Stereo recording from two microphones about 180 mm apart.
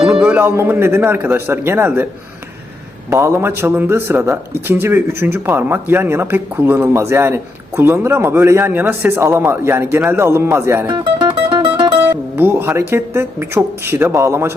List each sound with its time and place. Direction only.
0.0 s a man's voice: 5° right (ahead or behind)
3.1 s speech: 15° right (ahead or behind)
10.9 s music: 25° right (ahead or behind)
12.4 s speech: 10° right (ahead or behind)